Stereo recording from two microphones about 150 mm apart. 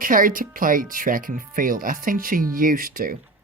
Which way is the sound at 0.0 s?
65° right (ahead or behind).